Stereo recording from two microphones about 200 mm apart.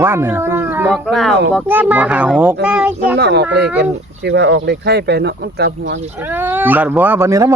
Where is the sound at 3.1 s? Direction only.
55° right (ahead or behind).